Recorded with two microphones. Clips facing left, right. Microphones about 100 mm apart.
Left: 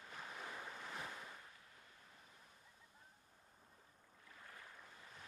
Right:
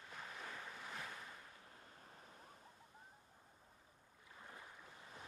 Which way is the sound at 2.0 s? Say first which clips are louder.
Right 4 dB; 45° right (ahead or behind).